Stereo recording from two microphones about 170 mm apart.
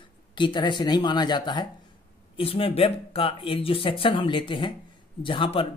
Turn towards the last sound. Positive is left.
turn(degrees=30)  # may be behind; listen again after turning